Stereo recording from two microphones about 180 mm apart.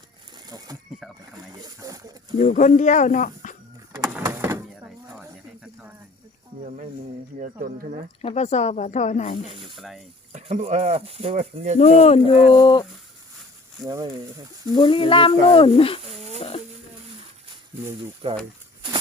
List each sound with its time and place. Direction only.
0.4 s speech: 20° right (ahead or behind)
2.4 s speech: 45° left (ahead or behind)
4.2 s door: 15° right (ahead or behind)
7.3 s speech: 50° right (ahead or behind)
8.2 s speech: 35° left (ahead or behind)
9.7 s speech: centre (ahead or behind)
10.3 s speech: 40° right (ahead or behind)
11.8 s speech: 35° left (ahead or behind)
12.5 s speech: 25° left (ahead or behind)
13.8 s speech: 20° right (ahead or behind)
14.7 s speech: 30° left (ahead or behind)
18.2 s speech: 30° right (ahead or behind)